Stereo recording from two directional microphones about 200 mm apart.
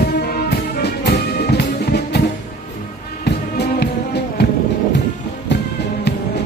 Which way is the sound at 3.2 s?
55° left (ahead or behind).